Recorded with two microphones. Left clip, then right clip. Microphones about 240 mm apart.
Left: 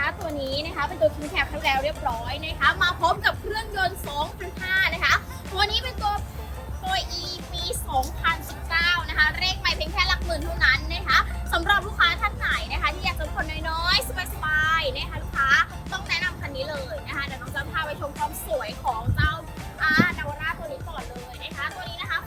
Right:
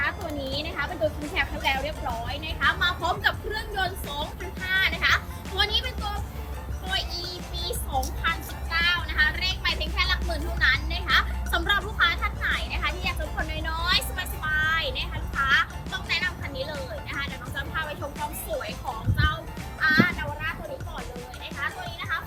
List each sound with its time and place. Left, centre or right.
0.0 s a sound: centre
2.2 s a woman's voice: centre
4.6 s children playing: centre
6.9 s music: centre
8.7 s music: centre
13.5 s vehicle: centre
14.2 s music: centre
21.9 s music: left